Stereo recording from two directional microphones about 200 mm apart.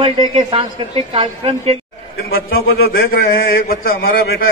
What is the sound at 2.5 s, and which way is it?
Speech, 85° left.